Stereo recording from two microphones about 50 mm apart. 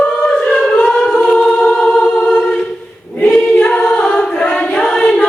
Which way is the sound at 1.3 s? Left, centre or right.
Centre.